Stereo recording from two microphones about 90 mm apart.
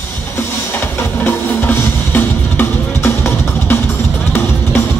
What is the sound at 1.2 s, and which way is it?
Music, 25° left (ahead or behind).